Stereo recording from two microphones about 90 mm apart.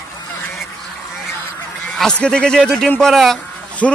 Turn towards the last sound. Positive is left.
turn(degrees=5)  # may be behind; listen again after turning